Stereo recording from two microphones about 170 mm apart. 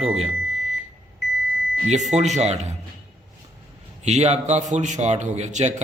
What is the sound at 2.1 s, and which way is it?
Speech, 45° right (ahead or behind).